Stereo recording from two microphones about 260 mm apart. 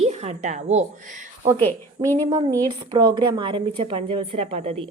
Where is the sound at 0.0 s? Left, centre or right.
Right.